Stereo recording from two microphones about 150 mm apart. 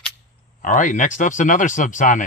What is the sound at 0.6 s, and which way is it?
Speech, 60° left (ahead or behind).